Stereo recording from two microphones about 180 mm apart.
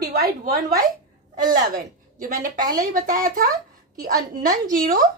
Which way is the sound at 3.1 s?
50° right (ahead or behind).